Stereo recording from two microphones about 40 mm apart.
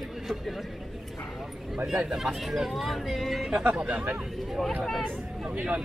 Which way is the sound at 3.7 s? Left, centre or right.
Right.